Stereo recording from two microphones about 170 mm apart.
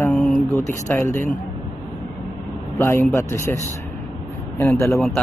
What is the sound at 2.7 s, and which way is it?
Speech, 15° left (ahead or behind).